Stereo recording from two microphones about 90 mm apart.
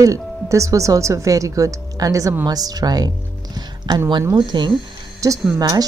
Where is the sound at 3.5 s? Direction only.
50° right (ahead or behind).